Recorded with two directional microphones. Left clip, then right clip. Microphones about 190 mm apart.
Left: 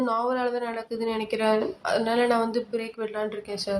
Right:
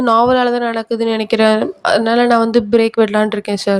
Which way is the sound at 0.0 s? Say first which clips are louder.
Right 14 dB; 45° right (ahead or behind).